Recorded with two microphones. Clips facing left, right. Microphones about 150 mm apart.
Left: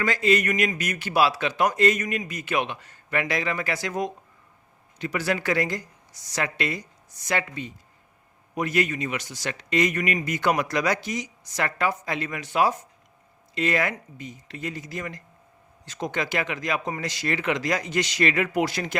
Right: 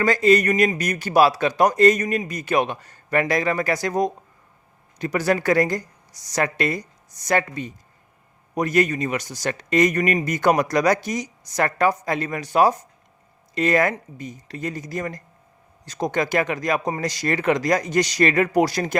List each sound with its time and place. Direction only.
0.0 s a man's voice: 40° right (ahead or behind)